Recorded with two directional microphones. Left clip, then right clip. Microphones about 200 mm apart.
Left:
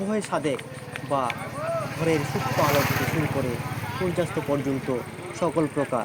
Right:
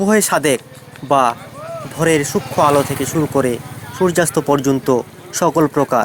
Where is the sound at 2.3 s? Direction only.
20° right (ahead or behind).